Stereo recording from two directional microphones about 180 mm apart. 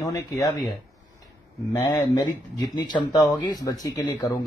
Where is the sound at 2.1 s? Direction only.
25° left (ahead or behind).